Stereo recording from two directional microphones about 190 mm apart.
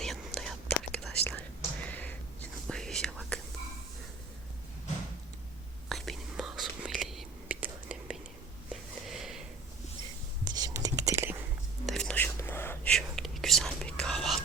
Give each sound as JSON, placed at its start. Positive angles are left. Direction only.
{"t": 0.0, "sound": "whispering", "side_deg": 0}
{"t": 5.9, "sound": "whispering", "side_deg": 0}
{"t": 8.7, "sound": "a sound", "side_deg": 0}
{"t": 10.4, "sound": "whispering", "side_deg": -20}
{"t": 11.9, "sound": "whispering", "side_deg": 5}